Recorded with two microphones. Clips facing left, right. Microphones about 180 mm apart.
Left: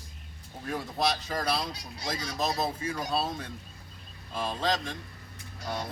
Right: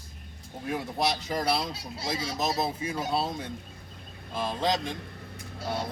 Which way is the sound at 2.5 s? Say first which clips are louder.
Right 1 dB; 10° right (ahead or behind).